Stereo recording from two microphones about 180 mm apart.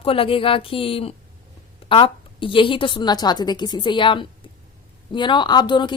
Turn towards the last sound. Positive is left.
turn(degrees=25)  # may be behind; listen again after turning